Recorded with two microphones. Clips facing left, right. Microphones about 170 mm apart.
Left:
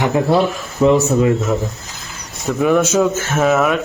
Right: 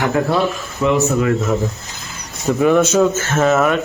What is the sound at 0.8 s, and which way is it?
Speech, 35° left (ahead or behind).